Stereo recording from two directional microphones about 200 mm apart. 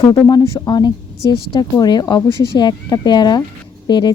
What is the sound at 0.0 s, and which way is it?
A woman's voice, 20° left (ahead or behind).